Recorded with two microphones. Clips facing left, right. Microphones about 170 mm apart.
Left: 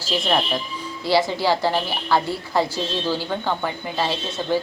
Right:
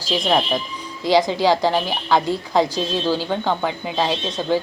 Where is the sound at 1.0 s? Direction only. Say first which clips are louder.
Right 3 dB; 15° right (ahead or behind).